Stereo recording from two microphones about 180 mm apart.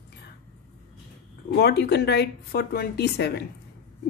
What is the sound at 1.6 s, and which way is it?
Speech, 65° left (ahead or behind).